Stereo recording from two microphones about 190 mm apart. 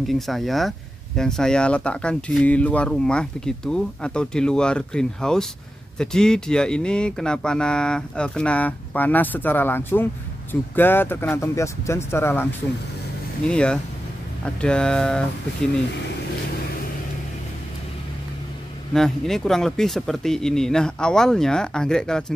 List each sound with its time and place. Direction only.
0.0 s speech: centre (ahead or behind)
18.9 s speech: centre (ahead or behind)